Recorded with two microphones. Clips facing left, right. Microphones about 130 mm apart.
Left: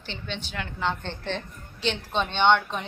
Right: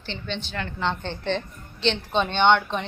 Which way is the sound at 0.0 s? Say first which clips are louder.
Right 3 dB; 10° left (ahead or behind).